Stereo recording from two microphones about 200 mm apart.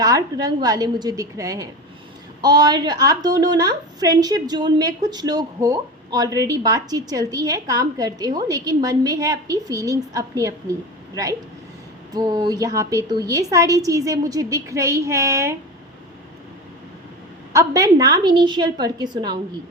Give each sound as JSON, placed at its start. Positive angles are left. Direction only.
{"t": 0.0, "sound": "a woman's voice", "side_deg": -20}
{"t": 17.5, "sound": "a woman's voice", "side_deg": -15}